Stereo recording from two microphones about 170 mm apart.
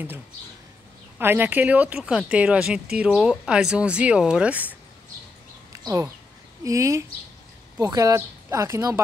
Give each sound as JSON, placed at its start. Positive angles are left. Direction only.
{"t": 1.1, "sound": "speech", "side_deg": -10}
{"t": 5.7, "sound": "a sound", "side_deg": -20}
{"t": 6.6, "sound": "a woman's voice", "side_deg": -20}